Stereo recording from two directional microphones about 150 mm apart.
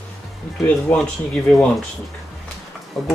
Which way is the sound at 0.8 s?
5° left (ahead or behind).